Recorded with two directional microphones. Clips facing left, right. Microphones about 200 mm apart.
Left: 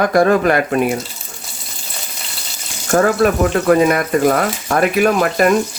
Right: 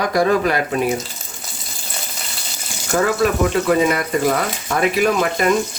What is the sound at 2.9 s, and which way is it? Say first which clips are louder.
Speech: left 4 dB; 45° left (ahead or behind).